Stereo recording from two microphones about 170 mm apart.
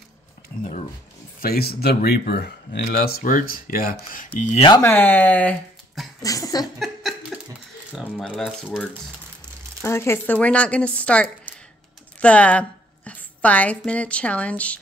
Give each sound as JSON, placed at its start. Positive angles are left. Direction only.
{"t": 1.4, "sound": "speech", "side_deg": 65}
{"t": 4.6, "sound": "speech", "side_deg": 15}
{"t": 6.2, "sound": "a sound", "side_deg": 20}
{"t": 6.6, "sound": "a sound", "side_deg": 0}
{"t": 7.9, "sound": "speech", "side_deg": 0}
{"t": 9.8, "sound": "a woman's voice", "side_deg": 15}